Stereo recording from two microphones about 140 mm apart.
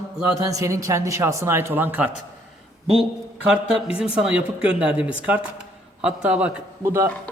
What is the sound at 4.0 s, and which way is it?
Speech, 5° right (ahead or behind).